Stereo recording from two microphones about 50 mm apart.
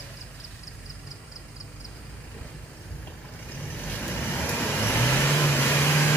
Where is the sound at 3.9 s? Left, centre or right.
Left.